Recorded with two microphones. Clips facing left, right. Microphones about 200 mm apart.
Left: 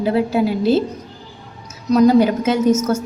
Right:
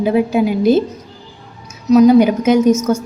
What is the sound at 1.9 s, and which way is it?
A woman's voice, 10° right (ahead or behind).